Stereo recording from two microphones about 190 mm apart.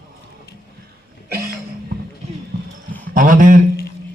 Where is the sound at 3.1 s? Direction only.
45° right (ahead or behind).